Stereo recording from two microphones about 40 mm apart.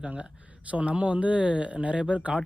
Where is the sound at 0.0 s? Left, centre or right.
Right.